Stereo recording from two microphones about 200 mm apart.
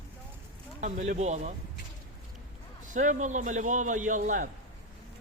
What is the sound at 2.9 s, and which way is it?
Speech, 40° right (ahead or behind).